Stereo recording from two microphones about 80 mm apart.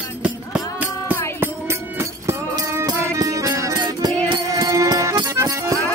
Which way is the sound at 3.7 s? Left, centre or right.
Right.